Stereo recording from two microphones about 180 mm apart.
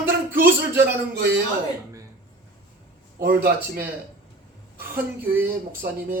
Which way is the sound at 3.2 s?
55° right (ahead or behind).